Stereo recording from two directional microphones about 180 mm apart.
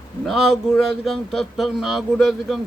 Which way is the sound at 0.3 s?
Centre (ahead or behind).